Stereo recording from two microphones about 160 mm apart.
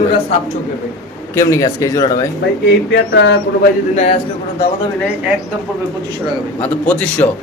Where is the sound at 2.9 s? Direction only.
90° left.